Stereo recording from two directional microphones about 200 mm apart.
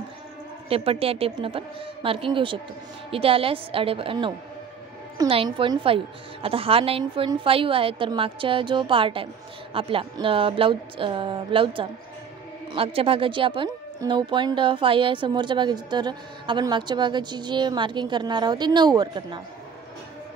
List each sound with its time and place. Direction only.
0.7 s a woman's voice: 30° right (ahead or behind)